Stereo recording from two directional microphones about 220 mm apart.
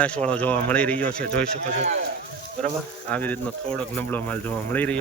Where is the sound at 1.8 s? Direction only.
30° right (ahead or behind).